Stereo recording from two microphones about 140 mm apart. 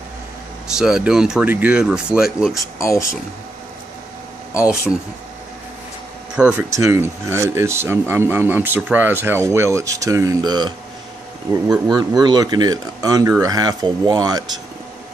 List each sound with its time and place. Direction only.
0.7 s speech: 5° right (ahead or behind)
2.5 s speech: 20° left (ahead or behind)
6.4 s speech: 5° right (ahead or behind)
6.7 s speech: 20° right (ahead or behind)